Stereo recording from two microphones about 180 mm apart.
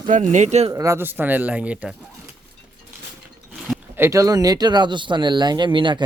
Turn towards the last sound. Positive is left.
turn(degrees=-25)  # may be behind; listen again after turning